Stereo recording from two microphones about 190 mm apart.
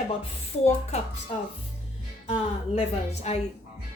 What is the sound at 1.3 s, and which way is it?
A woman's voice, 35° left (ahead or behind).